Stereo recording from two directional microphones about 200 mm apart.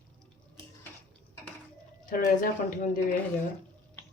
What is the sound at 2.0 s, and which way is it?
Speech, 45° left (ahead or behind).